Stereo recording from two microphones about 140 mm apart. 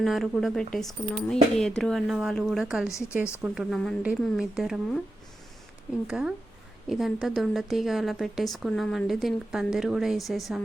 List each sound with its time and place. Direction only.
0.0 s speech: centre (ahead or behind)
6.1 s speech: 5° right (ahead or behind)